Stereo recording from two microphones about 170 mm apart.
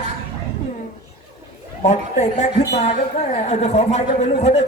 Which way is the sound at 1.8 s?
40° left (ahead or behind).